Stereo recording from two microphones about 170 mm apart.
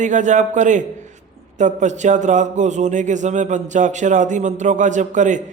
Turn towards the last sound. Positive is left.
turn(degrees=-45)  # may be behind; listen again after turning